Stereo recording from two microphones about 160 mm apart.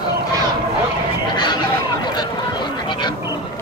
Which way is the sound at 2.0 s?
25° left (ahead or behind).